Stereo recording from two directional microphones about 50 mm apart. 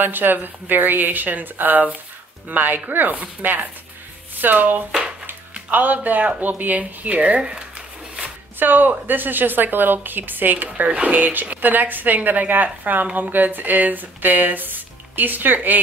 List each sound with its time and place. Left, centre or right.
0.0 s a woman's voice: right
8.5 s a woman's voice: right